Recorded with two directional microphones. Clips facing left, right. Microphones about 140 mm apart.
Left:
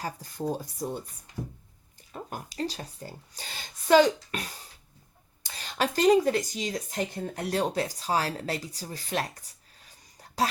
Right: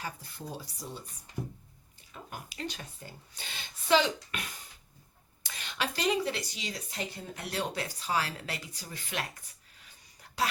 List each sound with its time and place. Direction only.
0.0 s speech: 40° left (ahead or behind)
2.1 s speech: 40° left (ahead or behind)
5.5 s speech: 40° left (ahead or behind)
9.8 s a sound: 40° left (ahead or behind)